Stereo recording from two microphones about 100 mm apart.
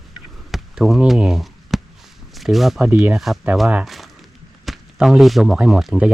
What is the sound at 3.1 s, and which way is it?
Speech, centre (ahead or behind).